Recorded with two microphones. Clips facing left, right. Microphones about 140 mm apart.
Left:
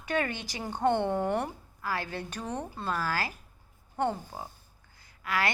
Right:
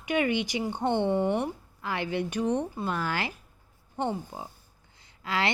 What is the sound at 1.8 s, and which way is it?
A woman's voice, 20° right (ahead or behind).